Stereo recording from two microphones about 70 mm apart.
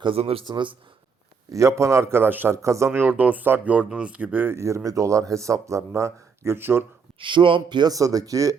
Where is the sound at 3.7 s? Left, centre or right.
Centre.